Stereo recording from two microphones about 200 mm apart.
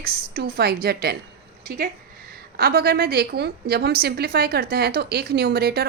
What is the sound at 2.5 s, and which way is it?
A woman's voice, 50° right (ahead or behind).